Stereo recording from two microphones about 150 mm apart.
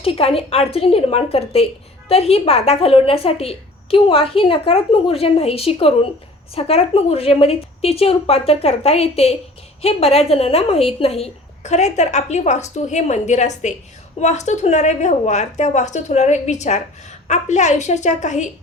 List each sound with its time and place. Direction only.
0.0 s a woman's voice: 40° left (ahead or behind)